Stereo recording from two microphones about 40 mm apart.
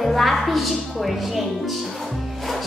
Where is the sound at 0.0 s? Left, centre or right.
Centre.